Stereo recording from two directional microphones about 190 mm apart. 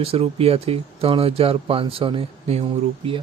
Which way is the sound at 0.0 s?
30° right (ahead or behind).